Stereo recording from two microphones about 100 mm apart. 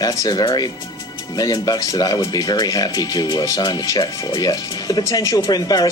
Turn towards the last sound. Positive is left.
turn(degrees=40)  # may be behind; listen again after turning